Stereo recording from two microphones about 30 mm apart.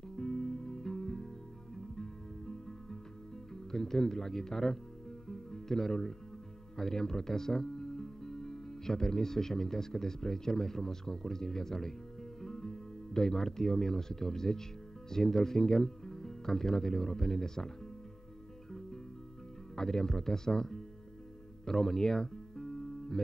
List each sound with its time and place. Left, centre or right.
0.1 s music: centre
2.0 s guitar: centre
3.7 s speech: centre
5.3 s music: centre
6.8 s speech: centre
19.7 s speech: centre
21.6 s music: centre